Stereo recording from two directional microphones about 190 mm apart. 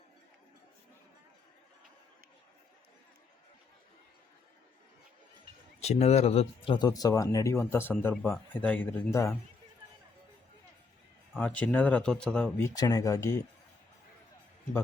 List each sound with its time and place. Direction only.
5.8 s speech: 35° left (ahead or behind); by 9.3 s 15° left (ahead or behind)
11.3 s speech: 10° left (ahead or behind)
12.6 s speech: 20° left (ahead or behind)